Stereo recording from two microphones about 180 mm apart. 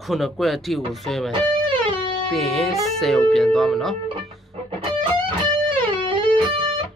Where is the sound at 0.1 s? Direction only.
Centre (ahead or behind).